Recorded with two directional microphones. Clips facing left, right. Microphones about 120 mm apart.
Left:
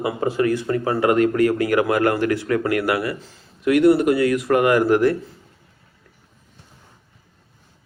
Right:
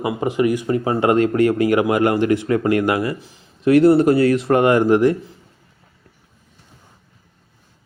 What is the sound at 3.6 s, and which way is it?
Speech, 30° right (ahead or behind).